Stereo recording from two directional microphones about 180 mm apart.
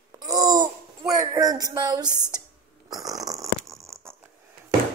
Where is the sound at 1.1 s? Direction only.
15° right (ahead or behind).